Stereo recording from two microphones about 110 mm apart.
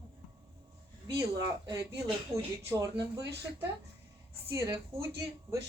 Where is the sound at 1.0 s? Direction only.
30° right (ahead or behind).